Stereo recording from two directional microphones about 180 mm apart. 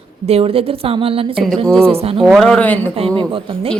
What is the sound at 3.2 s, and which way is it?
Speech, 30° right (ahead or behind).